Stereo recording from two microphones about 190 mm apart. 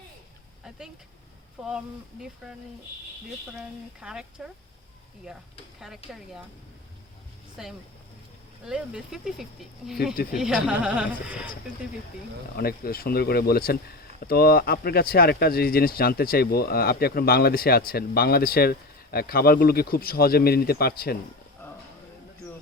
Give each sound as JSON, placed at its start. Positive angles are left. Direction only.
{"t": 1.6, "sound": "speech", "side_deg": -5}
{"t": 3.5, "sound": "speech", "side_deg": -5}
{"t": 6.0, "sound": "speech", "side_deg": 30}
{"t": 7.6, "sound": "speech", "side_deg": -5}
{"t": 12.5, "sound": "speech", "side_deg": 50}
{"t": 21.6, "sound": "a sound", "side_deg": 10}